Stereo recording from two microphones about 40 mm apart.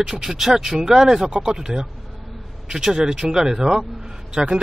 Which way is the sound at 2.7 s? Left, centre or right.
Centre.